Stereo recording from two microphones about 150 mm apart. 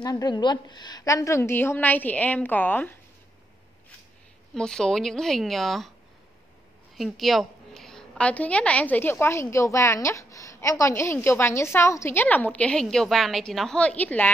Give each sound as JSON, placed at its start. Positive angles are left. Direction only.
{"t": 0.0, "sound": "a woman's voice", "side_deg": 25}
{"t": 4.6, "sound": "speech", "side_deg": 5}
{"t": 7.0, "sound": "a woman's voice", "side_deg": 0}